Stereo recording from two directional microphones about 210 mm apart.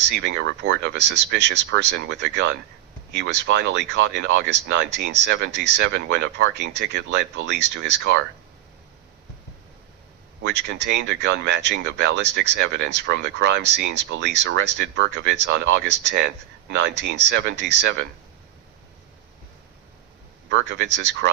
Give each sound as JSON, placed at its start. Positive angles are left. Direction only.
{"t": 0.2, "sound": "speech", "side_deg": -60}
{"t": 10.4, "sound": "speech", "side_deg": -55}
{"t": 20.5, "sound": "speech", "side_deg": -60}